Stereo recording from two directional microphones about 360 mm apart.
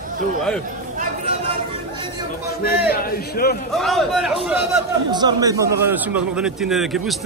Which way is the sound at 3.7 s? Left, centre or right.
Centre.